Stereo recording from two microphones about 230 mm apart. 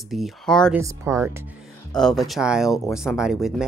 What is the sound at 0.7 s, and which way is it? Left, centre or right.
Speech, centre.